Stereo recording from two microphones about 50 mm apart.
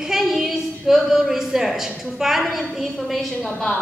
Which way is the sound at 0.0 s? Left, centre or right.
Centre.